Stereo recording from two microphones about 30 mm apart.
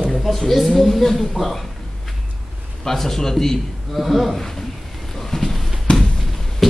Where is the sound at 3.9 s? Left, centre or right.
Centre.